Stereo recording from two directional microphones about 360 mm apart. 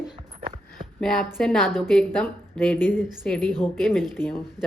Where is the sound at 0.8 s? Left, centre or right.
Centre.